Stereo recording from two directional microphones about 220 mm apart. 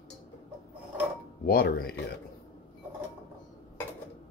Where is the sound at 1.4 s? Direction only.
45° left (ahead or behind).